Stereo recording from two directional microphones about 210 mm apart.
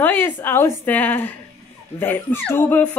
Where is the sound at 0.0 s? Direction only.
10° left (ahead or behind).